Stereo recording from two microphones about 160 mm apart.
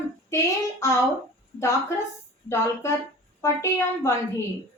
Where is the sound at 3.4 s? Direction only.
15° left (ahead or behind).